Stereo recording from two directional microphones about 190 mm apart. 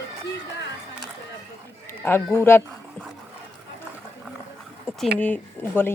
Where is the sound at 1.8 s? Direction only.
10° left (ahead or behind).